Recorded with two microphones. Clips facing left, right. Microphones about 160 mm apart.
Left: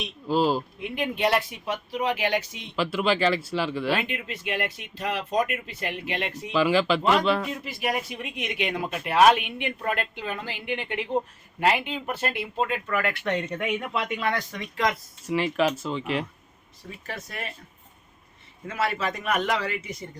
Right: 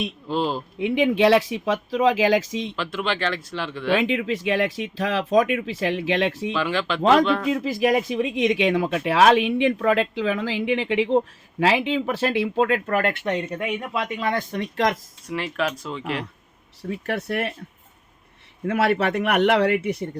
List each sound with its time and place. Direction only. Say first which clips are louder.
0.3 s speech: left 3 dB; 5° left (ahead or behind)
0.8 s speech: right 8 dB; 90° right
2.7 s speech: left 7 dB; 5° left (ahead or behind)
4.0 s speech: right 10 dB; 90° right
6.5 s speech: left 3 dB; 5° left (ahead or behind)
7.5 s speech: right 9 dB; 90° right
12.7 s speech: right 5 dB; 55° right (ahead or behind)
13.2 s speech: right 2 dB; 15° right (ahead or behind)
14.0 s speech: right 3 dB; 25° right (ahead or behind)
14.5 s speech: right 4 dB; 60° right (ahead or behind)
15.3 s speech: left 2 dB; 5° left (ahead or behind)
16.9 s speech: right 11 dB; 65° right (ahead or behind)
18.6 s speech: right 7 dB; 65° right (ahead or behind)